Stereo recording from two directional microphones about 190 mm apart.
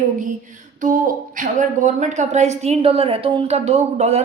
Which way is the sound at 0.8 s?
45° right (ahead or behind).